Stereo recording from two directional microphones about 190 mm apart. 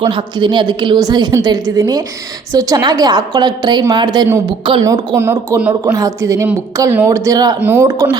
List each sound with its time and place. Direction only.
0.0 s a woman's voice: 25° right (ahead or behind)
5.1 s speech: 15° right (ahead or behind)